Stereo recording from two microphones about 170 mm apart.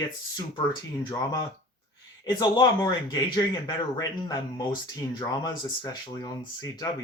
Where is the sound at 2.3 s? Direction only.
25° left (ahead or behind).